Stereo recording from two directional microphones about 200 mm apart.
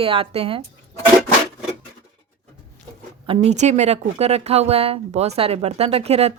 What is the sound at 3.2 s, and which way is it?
Speech, 30° right (ahead or behind).